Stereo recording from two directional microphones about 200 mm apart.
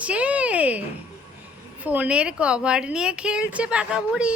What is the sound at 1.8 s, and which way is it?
Speech, 10° right (ahead or behind).